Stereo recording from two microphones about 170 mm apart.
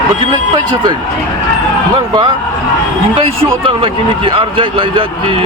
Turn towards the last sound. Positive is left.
turn(degrees=-30)  # may be behind; listen again after turning